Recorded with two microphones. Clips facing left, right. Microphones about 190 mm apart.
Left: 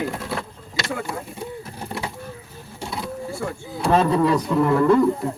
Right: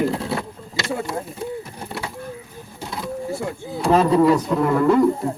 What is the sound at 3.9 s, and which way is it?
Speech, 15° right (ahead or behind).